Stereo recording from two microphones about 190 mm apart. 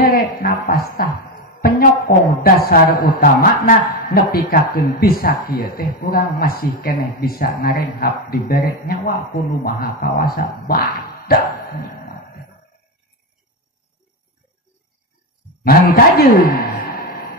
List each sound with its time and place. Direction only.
0.0 s speech: 50° left (ahead or behind)
11.8 s a sound: 50° left (ahead or behind)
15.6 s a man's voice: 50° left (ahead or behind)